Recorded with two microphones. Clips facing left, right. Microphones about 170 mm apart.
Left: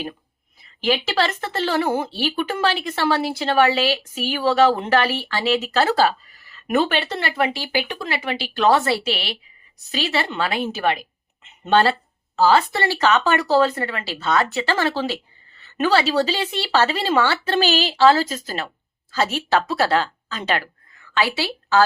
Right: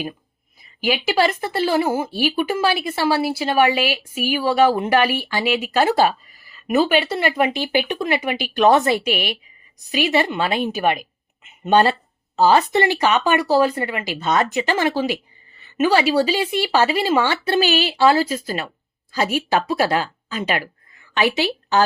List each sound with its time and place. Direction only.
0.6 s a woman's voice: 10° right (ahead or behind)